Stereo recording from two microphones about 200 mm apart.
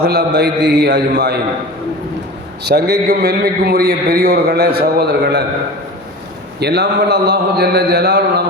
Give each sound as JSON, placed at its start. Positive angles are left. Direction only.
{"t": 0.0, "sound": "a man's voice", "side_deg": -55}
{"t": 2.6, "sound": "a man's voice", "side_deg": -50}
{"t": 6.6, "sound": "a man's voice", "side_deg": -55}